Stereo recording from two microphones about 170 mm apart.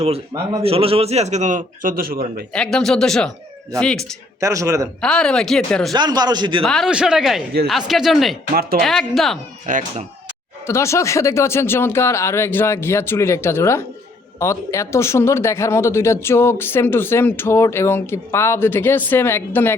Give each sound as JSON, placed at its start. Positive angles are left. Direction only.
{"t": 0.6, "sound": "a man's voice", "side_deg": -35}
{"t": 2.5, "sound": "speech", "side_deg": 5}
{"t": 4.4, "sound": "speech", "side_deg": -20}
{"t": 4.9, "sound": "speech", "side_deg": 5}
{"t": 5.9, "sound": "speech", "side_deg": -25}
{"t": 6.6, "sound": "speech", "side_deg": 5}
{"t": 9.7, "sound": "a man's voice", "side_deg": -50}
{"t": 10.7, "sound": "speech", "side_deg": 15}